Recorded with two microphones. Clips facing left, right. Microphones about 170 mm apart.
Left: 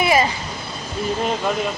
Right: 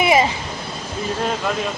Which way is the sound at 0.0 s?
20° right (ahead or behind).